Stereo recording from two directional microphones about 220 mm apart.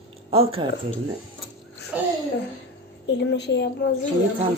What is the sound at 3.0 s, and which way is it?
Speech, 50° left (ahead or behind).